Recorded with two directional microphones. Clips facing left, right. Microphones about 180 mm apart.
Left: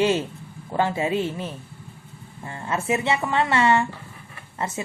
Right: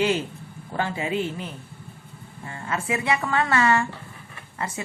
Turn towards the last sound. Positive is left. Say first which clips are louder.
# left 3 dB
turn(degrees=25)  # may be behind; listen again after turning